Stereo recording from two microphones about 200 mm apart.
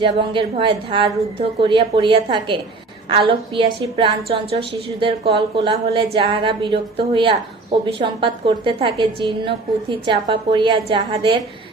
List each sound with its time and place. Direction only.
0.0 s a woman's voice: 25° right (ahead or behind)